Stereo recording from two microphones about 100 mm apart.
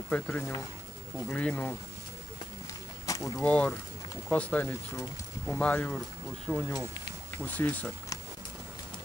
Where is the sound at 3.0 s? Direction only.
35° left (ahead or behind).